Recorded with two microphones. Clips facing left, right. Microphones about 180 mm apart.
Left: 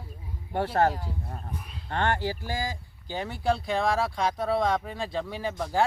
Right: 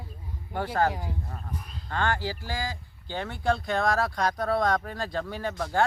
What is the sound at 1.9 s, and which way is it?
Speech, 25° left (ahead or behind).